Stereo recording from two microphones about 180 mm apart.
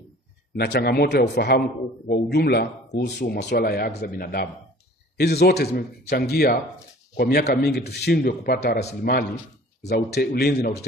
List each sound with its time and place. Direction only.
0.6 s speech: 60° left (ahead or behind)